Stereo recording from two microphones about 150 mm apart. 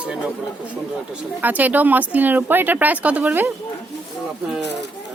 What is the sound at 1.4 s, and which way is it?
A woman's voice, 10° right (ahead or behind).